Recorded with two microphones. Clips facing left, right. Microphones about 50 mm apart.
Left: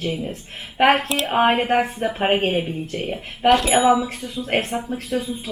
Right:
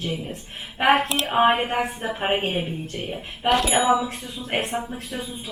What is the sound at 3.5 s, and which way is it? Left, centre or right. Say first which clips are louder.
Speech: left 4 dB; centre.